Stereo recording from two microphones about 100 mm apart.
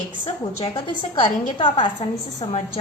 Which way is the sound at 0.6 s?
60° left (ahead or behind).